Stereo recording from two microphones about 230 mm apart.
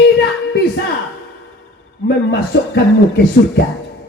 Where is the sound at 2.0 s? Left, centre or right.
Left.